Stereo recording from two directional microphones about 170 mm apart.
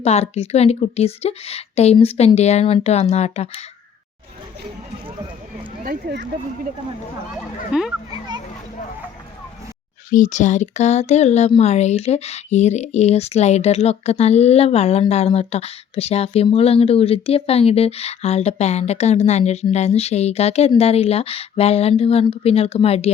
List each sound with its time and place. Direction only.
0.0 s speech: 40° left (ahead or behind)
5.8 s speech: 65° right (ahead or behind)
7.7 s a child's voice: 5° right (ahead or behind)
10.1 s speech: 50° left (ahead or behind)